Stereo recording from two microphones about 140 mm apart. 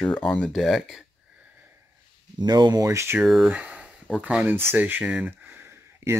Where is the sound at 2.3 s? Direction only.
30° right (ahead or behind).